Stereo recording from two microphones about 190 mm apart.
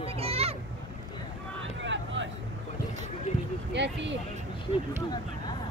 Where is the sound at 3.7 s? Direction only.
70° right (ahead or behind).